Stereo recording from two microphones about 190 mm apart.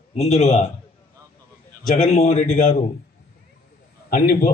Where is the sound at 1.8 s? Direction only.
40° left (ahead or behind).